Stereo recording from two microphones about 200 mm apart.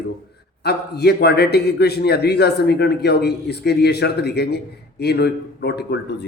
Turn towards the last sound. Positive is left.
turn(degrees=55)  # may be behind; listen again after turning